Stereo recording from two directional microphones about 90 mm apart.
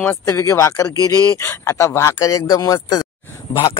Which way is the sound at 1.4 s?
30° left (ahead or behind).